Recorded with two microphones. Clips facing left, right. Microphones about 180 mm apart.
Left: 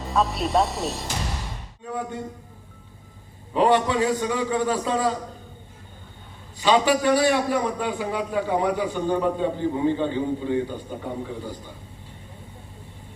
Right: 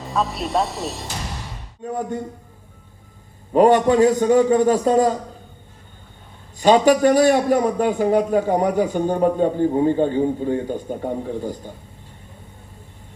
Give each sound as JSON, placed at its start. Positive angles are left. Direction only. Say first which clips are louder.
{"t": 0.0, "sound": "speech", "louder": "even", "side_deg": 0}
{"t": 1.8, "sound": "a man's voice", "louder": "right 5 dB", "side_deg": -45}
{"t": 3.5, "sound": "a man's voice", "louder": "right 6 dB", "side_deg": -50}
{"t": 6.6, "sound": "a man's voice", "louder": "right 6 dB", "side_deg": -45}